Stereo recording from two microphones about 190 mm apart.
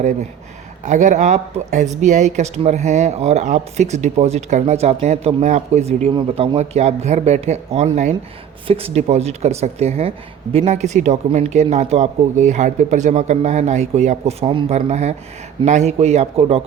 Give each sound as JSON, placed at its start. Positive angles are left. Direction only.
{"t": 0.9, "sound": "speech", "side_deg": -40}